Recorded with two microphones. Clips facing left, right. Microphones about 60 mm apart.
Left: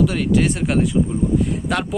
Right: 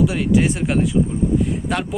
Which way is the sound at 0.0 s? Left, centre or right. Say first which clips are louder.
Even; centre.